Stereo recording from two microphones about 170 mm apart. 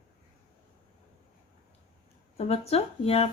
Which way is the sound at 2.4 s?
35° left (ahead or behind).